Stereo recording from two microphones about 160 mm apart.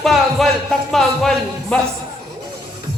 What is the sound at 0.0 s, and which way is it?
A man's voice, centre (ahead or behind).